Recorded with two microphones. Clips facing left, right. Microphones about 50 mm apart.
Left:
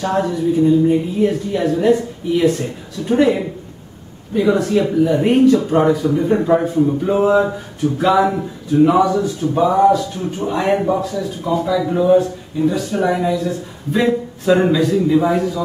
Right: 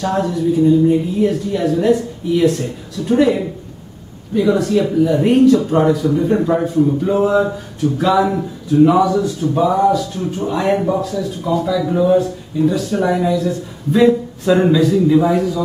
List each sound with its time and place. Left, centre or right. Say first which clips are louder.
0.0 s speech: even; centre